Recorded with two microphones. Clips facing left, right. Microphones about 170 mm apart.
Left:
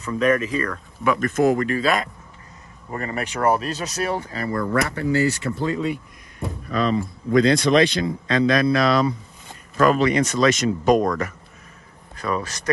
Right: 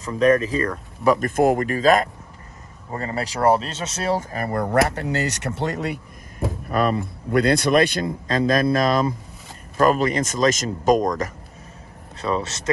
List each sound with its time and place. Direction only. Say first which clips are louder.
0.0 s speech: right 2 dB; 35° right (ahead or behind)
1.3 s a man's voice: even; 55° right (ahead or behind)
2.9 s speech: even; 30° right (ahead or behind)
4.2 s speech: right 1 dB; 55° right (ahead or behind); by 5.9 s 75° right (ahead or behind)
6.7 s a man's voice: even; 60° right (ahead or behind)
12.2 s speech: right 2 dB; 25° right (ahead or behind)